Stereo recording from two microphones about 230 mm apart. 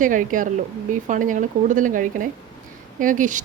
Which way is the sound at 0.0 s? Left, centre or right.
Right.